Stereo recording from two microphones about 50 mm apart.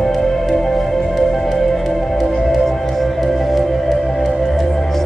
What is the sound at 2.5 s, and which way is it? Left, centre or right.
Music, centre.